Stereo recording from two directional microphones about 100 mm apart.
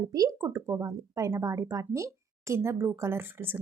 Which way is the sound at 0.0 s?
35° right (ahead or behind).